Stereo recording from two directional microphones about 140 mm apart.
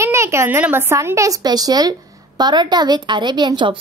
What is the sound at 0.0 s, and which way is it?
A woman's voice, 20° right (ahead or behind).